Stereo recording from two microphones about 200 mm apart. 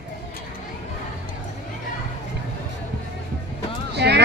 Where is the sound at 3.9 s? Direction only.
55° right (ahead or behind).